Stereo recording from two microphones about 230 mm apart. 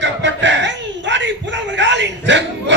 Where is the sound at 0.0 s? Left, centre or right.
Right.